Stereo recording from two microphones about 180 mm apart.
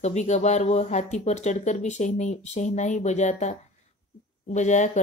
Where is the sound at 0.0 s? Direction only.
40° left (ahead or behind).